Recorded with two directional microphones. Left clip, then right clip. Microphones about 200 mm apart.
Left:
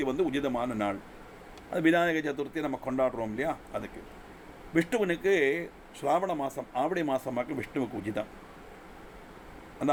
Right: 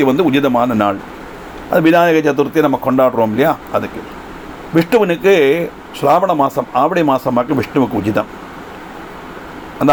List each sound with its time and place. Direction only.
0.0 s speech: 25° right (ahead or behind)
1.7 s a man's voice: 10° right (ahead or behind)
2.8 s speech: 30° right (ahead or behind)